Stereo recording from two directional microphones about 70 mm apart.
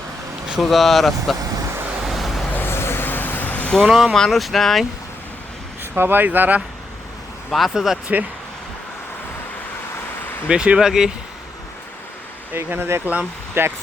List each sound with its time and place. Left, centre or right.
0.6 s speech: centre
2.0 s vehicle: centre
2.5 s vehicle: left
3.8 s speech: centre
6.0 s speech: right
7.5 s speech: centre
10.5 s speech: centre
12.5 s speech: right